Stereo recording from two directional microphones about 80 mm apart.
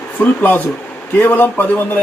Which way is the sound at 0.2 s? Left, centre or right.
Left.